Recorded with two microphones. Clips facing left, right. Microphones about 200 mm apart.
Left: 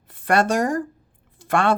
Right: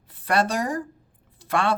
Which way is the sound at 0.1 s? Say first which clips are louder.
Left 4 dB; 50° left (ahead or behind).